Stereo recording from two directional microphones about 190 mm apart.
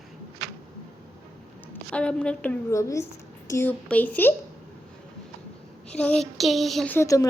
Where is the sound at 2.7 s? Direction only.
15° left (ahead or behind).